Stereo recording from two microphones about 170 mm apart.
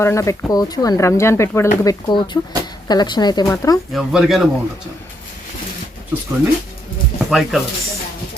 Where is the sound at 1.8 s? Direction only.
25° left (ahead or behind).